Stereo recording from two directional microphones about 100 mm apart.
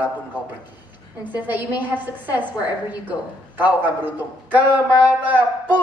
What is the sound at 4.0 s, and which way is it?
A man's voice, 20° right (ahead or behind).